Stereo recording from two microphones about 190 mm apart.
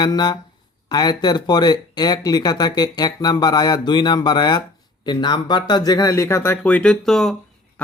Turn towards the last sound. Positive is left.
turn(degrees=0)  # may be behind; listen again after turning